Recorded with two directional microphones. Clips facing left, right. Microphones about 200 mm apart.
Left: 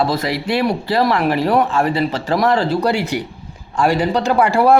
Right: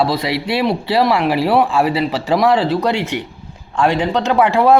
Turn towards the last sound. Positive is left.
turn(degrees=0)  # may be behind; listen again after turning